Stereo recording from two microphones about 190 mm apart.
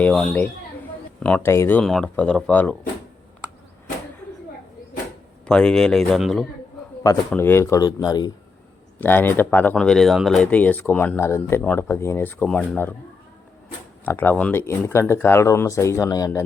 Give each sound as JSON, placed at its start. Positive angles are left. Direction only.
{"t": 0.0, "sound": "speech", "side_deg": 5}
{"t": 5.5, "sound": "speech", "side_deg": 5}
{"t": 7.3, "sound": "speech", "side_deg": 10}
{"t": 9.0, "sound": "speech", "side_deg": 10}
{"t": 14.0, "sound": "speech", "side_deg": 10}